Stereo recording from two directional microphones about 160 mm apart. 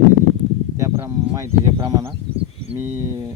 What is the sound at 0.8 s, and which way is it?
Speech, 20° right (ahead or behind).